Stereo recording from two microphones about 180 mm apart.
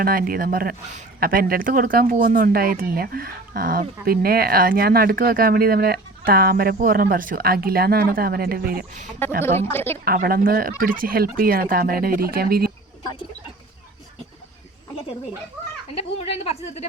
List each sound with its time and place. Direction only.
0.0 s speech: 55° right (ahead or behind)
9.4 s a woman's voice: 10° left (ahead or behind)
10.0 s speech: 55° right (ahead or behind)
16.2 s a woman's voice: 35° left (ahead or behind)